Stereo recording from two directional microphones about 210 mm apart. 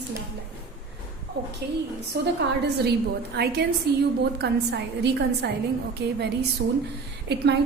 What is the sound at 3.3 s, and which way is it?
A woman's voice, 50° right (ahead or behind).